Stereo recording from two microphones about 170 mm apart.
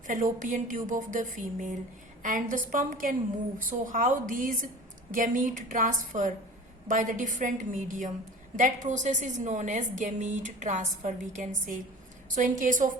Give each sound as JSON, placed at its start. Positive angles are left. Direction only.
{"t": 0.1, "sound": "a woman's voice", "side_deg": -50}